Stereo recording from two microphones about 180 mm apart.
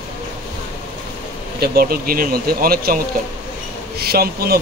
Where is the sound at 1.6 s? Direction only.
55° right (ahead or behind).